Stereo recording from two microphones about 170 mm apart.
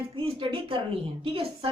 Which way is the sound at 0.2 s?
30° right (ahead or behind).